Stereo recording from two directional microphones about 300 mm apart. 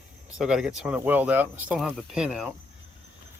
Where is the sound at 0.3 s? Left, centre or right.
Centre.